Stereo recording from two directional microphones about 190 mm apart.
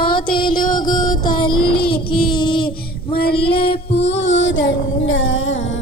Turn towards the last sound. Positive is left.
turn(degrees=90)